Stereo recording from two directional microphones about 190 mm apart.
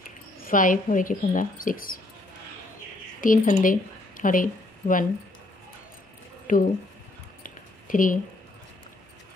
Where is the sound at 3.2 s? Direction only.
45° left (ahead or behind).